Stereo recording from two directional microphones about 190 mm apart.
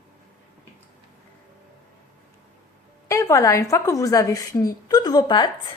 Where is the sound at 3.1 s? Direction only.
15° left (ahead or behind).